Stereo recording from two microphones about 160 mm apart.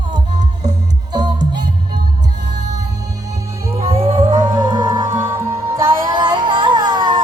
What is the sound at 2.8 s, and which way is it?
Music, 20° right (ahead or behind).